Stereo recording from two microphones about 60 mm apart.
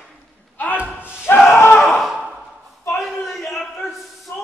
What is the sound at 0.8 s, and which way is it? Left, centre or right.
Slam, centre.